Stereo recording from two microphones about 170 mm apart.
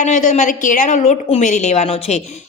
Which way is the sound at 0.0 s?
45° left (ahead or behind).